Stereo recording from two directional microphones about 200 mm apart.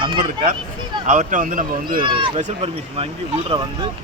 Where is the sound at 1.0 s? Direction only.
40° right (ahead or behind).